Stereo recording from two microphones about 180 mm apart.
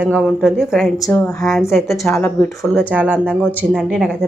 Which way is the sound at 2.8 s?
10° right (ahead or behind).